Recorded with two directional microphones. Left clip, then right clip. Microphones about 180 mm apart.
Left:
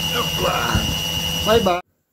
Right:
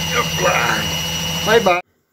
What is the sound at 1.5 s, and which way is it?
Speech, 35° left (ahead or behind).